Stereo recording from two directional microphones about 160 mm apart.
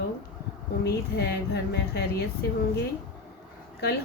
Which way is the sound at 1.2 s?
90° left.